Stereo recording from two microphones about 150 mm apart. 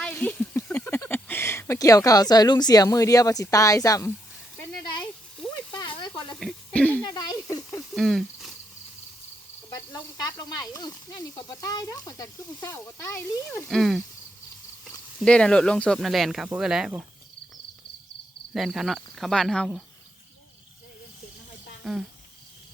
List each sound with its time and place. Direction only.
0.0 s speech: 10° left (ahead or behind)
6.0 s a sound: 30° left (ahead or behind)
6.4 s a sound: 5° left (ahead or behind)
7.0 s snake: 25° left (ahead or behind)
7.9 s cricket: centre (ahead or behind)
9.6 s speech: 25° left (ahead or behind)
13.7 s speech: centre (ahead or behind)
15.2 s speech: 5° left (ahead or behind)
18.5 s speech: centre (ahead or behind)
21.8 s speech: centre (ahead or behind)